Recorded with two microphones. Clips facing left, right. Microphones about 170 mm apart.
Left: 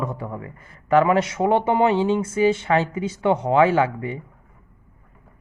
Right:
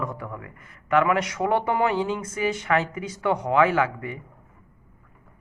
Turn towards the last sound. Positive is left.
turn(degrees=30)  # may be behind; listen again after turning